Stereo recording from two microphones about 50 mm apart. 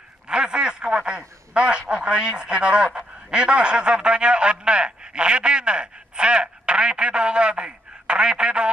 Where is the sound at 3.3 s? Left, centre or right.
Centre.